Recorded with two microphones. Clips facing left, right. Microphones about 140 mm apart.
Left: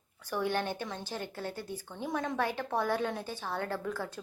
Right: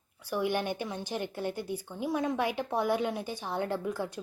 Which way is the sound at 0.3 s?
15° right (ahead or behind).